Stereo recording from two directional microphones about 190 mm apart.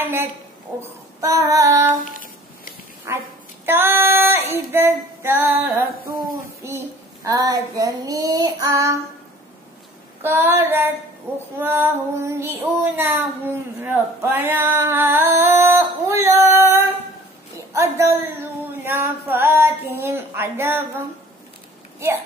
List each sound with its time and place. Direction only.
0.0 s a woman's voice: 10° right (ahead or behind)
0.7 s child singing: 15° right (ahead or behind)
3.1 s child singing: 15° right (ahead or behind)
3.6 s female singing: 10° right (ahead or behind)
6.6 s a sound: 15° right (ahead or behind)
7.2 s female singing: 20° right (ahead or behind)
10.2 s child singing: 10° right (ahead or behind)
17.7 s a sound: 15° right (ahead or behind)
20.0 s child singing: 15° right (ahead or behind)